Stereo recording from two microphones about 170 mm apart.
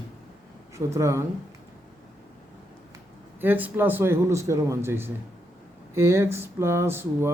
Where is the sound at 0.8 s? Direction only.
15° right (ahead or behind).